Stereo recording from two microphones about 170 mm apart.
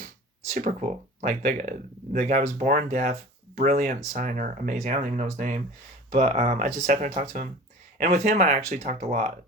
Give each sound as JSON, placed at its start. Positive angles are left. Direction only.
{"t": 0.5, "sound": "speech", "side_deg": -45}